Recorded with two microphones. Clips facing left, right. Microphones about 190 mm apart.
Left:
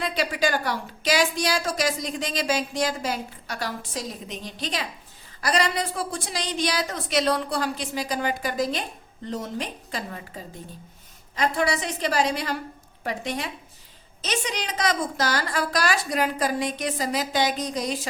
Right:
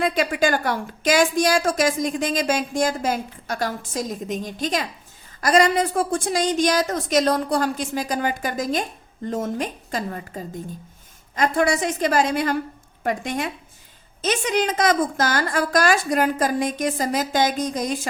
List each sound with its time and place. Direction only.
0.0 s a woman's voice: 50° right (ahead or behind)